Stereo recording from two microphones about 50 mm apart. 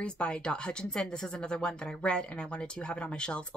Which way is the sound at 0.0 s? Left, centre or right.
Centre.